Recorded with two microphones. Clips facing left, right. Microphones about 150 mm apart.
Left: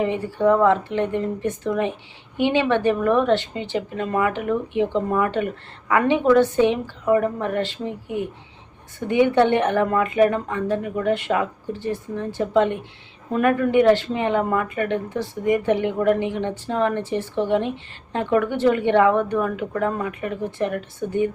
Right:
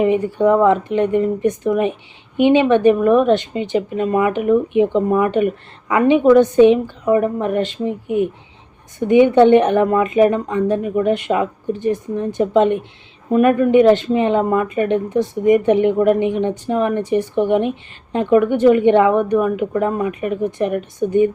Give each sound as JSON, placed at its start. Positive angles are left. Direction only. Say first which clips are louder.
{"t": 0.0, "sound": "speech", "louder": "right 5 dB", "side_deg": -15}